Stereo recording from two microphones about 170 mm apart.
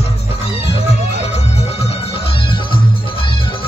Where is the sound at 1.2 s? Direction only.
35° left (ahead or behind).